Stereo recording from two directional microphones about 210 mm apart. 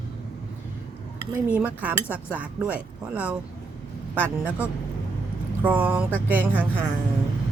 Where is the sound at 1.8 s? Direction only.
5° right (ahead or behind).